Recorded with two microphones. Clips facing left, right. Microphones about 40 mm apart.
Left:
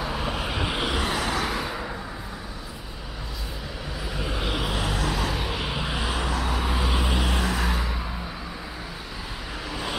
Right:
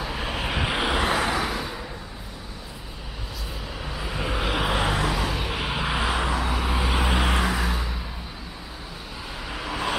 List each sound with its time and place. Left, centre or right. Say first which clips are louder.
0.3 s vehicle: right 1 dB; right
0.9 s vehicle: right 3 dB; centre
4.0 s vehicle: right 3 dB; right
5.0 s vehicle: right 1 dB; centre
5.7 s vehicle: right 3 dB; right
6.0 s vehicle: right 2 dB; centre
6.9 s vehicle: right 3 dB; right
7.5 s vehicle: even; centre
9.7 s vehicle: right 5 dB; right